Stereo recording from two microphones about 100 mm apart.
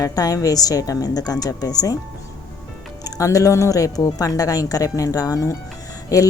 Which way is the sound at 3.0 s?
35° left (ahead or behind).